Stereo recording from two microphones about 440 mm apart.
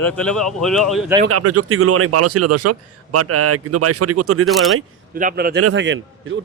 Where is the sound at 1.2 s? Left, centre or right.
Right.